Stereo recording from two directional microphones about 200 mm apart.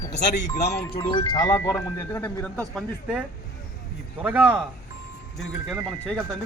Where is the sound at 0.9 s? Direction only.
25° left (ahead or behind); by 5.9 s 10° right (ahead or behind).